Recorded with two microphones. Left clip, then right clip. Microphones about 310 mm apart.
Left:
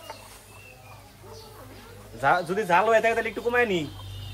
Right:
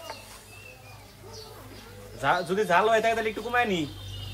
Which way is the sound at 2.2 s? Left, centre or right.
Left.